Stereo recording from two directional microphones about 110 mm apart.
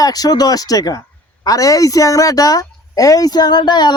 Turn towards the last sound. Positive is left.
turn(degrees=40)  # may be behind; listen again after turning